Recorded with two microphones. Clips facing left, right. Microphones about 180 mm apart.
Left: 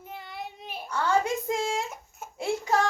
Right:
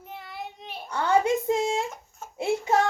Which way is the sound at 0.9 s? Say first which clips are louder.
Right 3 dB; 20° right (ahead or behind).